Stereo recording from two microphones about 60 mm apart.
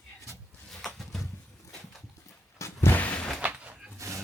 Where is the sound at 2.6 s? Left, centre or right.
Left.